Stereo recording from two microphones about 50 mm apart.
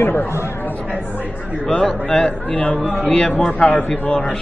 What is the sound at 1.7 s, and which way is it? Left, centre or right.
A man's voice, left.